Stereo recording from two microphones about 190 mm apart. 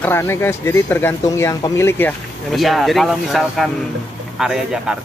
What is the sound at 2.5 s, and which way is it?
Speech, centre (ahead or behind).